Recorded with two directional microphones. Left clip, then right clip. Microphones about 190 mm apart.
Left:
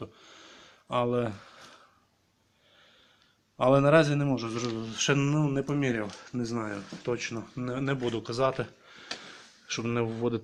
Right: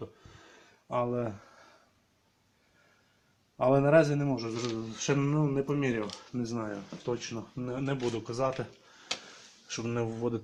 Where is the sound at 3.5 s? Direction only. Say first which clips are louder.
Left 2 dB; 15° left (ahead or behind).